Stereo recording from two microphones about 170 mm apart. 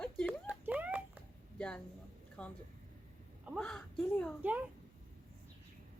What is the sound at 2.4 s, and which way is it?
Speech, 5° left (ahead or behind).